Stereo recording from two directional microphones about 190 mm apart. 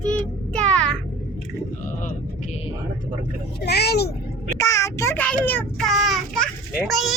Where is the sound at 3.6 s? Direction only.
60° left (ahead or behind).